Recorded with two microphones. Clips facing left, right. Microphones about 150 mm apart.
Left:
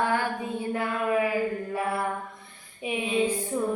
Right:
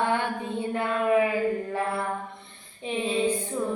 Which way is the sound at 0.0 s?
25° right (ahead or behind).